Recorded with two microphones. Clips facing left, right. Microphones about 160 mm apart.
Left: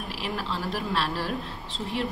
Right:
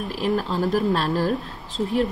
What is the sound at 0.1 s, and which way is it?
Speech, 45° right (ahead or behind).